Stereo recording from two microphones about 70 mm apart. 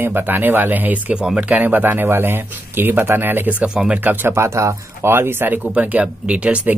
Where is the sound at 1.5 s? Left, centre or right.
Right.